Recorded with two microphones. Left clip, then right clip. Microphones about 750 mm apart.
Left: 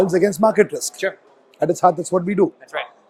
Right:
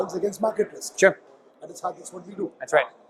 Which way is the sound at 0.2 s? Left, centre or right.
Left.